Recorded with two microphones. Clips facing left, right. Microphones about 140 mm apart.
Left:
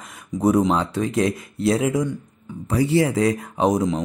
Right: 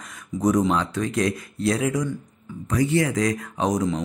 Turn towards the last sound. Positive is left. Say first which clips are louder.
# left 3 dB
turn(degrees=25)  # may be behind; listen again after turning